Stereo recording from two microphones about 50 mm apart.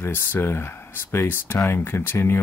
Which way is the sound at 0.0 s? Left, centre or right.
Left.